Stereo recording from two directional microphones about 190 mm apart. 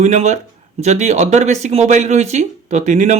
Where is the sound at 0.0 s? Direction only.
40° right (ahead or behind).